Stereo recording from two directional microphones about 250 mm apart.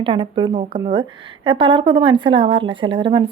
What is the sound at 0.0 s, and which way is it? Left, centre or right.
A woman's voice, centre.